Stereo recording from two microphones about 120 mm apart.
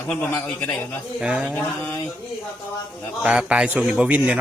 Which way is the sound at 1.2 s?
10° right (ahead or behind).